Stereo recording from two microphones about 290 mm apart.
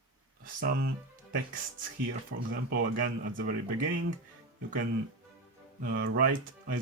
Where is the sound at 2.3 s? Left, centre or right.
Right.